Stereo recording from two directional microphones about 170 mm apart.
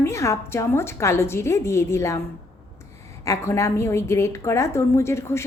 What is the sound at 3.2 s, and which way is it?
A woman's voice, 15° left (ahead or behind).